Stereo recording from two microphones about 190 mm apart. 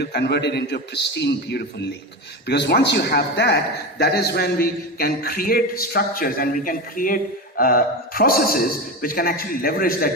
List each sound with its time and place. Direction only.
0.0 s a man's voice: 60° left (ahead or behind)